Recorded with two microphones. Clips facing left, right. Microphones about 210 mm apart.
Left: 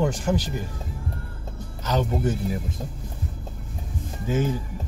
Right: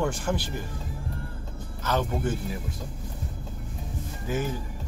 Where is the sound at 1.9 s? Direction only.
15° left (ahead or behind).